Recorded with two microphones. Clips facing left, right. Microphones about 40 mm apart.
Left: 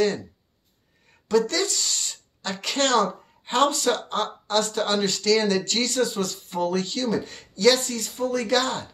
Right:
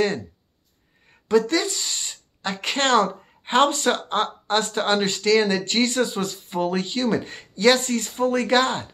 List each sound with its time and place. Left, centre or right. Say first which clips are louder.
1.3 s speech: right 2 dB; right
7.1 s speech: right 2 dB; right